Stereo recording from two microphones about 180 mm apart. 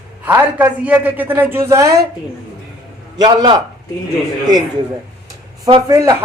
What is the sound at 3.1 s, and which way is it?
Speech, 25° right (ahead or behind).